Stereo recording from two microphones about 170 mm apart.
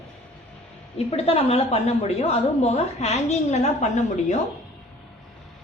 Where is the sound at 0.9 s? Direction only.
35° left (ahead or behind).